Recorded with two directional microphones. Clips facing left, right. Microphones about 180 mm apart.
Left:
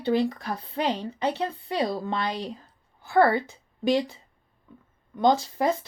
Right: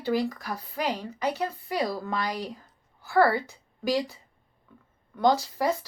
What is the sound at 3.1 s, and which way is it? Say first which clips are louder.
A woman's voice: left 2 dB; 20° left (ahead or behind).